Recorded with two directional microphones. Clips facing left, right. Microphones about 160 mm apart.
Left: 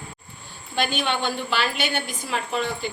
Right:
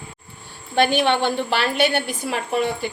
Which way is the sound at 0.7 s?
60° right (ahead or behind).